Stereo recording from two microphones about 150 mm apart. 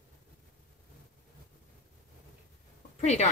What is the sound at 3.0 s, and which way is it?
Speech, 50° left (ahead or behind).